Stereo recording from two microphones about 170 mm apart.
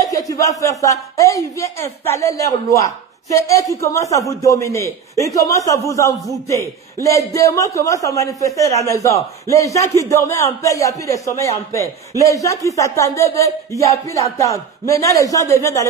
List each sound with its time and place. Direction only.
0.3 s a man's voice: 20° left (ahead or behind)